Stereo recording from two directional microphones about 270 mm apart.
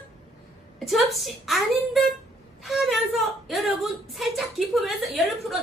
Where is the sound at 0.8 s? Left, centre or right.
Centre.